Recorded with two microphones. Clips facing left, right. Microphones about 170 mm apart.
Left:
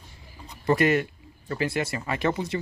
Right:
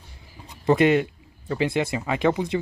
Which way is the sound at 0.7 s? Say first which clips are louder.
Right 3 dB; 20° right (ahead or behind).